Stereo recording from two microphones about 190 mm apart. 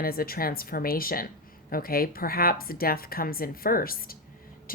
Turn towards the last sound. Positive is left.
turn(degrees=50)  # may be behind; listen again after turning